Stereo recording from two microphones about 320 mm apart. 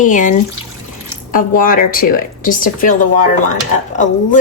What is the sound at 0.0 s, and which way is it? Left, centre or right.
A woman's voice, left.